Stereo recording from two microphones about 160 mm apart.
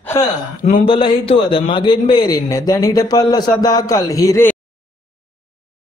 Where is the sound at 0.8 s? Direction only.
30° left (ahead or behind).